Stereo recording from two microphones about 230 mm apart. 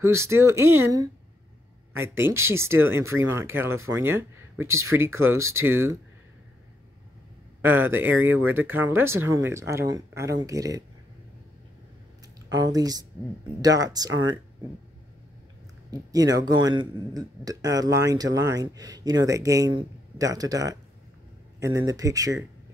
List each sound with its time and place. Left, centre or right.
0.0 s a man's voice: centre
7.6 s a man's voice: centre
12.4 s a man's voice: centre
15.9 s a man's voice: centre